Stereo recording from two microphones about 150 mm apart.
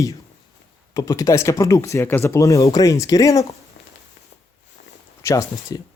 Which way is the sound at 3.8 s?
90° left.